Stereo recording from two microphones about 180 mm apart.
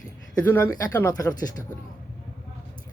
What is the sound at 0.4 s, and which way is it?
Speech, 10° left (ahead or behind).